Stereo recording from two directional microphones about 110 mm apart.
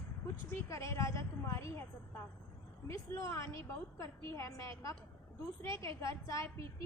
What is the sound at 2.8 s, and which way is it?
A woman's voice, 25° left (ahead or behind).